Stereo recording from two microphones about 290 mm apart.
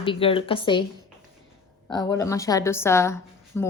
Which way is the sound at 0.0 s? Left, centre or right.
Centre.